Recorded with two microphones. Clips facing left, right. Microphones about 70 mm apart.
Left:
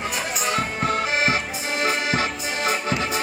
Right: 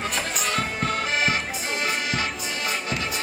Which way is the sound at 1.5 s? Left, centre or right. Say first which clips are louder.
Left 3 dB; left.